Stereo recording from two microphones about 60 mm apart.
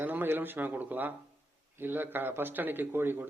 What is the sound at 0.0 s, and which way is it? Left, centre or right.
A man's voice, right.